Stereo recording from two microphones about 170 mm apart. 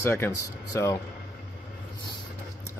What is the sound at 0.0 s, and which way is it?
Speech, 15° left (ahead or behind).